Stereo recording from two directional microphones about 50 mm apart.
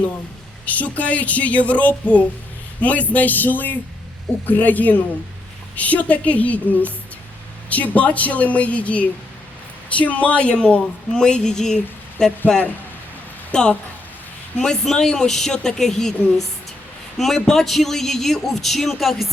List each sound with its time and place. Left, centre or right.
0.6 s a woman's voice: left
13.5 s a woman's voice: centre
17.2 s a man's voice: centre